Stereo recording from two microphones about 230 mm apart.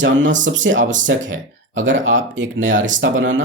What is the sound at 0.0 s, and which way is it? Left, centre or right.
Speech, right.